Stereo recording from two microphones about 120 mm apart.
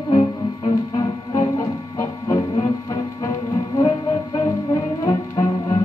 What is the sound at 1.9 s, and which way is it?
Music, 25° left (ahead or behind).